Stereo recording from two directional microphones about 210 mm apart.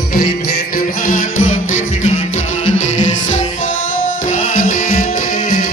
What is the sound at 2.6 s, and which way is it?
Music, 70° left (ahead or behind).